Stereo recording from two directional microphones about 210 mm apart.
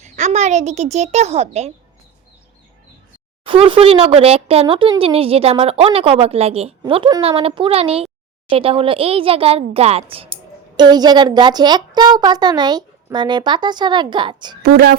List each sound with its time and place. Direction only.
0.0 s a child's voice: 35° right (ahead or behind)
3.4 s speech: 25° right (ahead or behind)
14.6 s speech: 45° right (ahead or behind)